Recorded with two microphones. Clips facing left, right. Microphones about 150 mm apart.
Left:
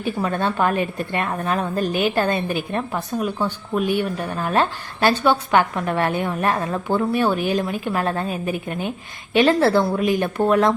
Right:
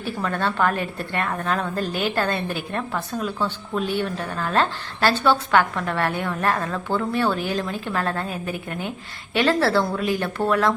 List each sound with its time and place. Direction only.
0.0 s a woman's voice: 15° left (ahead or behind)